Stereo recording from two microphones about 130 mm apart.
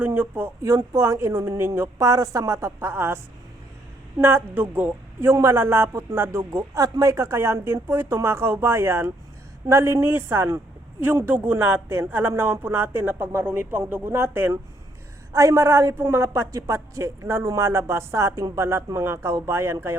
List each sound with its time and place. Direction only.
0.0 s a woman's voice: 15° right (ahead or behind)
4.2 s a woman's voice: 20° right (ahead or behind)